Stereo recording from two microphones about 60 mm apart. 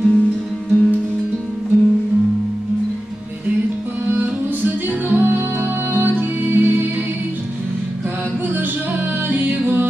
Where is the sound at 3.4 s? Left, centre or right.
Right.